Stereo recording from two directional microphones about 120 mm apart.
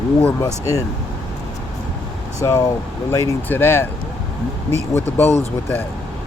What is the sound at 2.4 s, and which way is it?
Speech, 25° left (ahead or behind).